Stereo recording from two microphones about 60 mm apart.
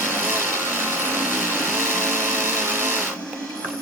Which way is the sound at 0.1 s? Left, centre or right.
Right.